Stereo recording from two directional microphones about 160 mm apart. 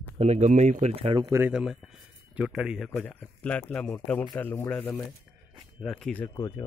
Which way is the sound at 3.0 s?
10° left (ahead or behind).